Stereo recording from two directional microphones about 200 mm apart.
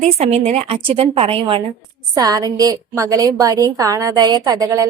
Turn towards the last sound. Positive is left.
turn(degrees=-15)  # may be behind; listen again after turning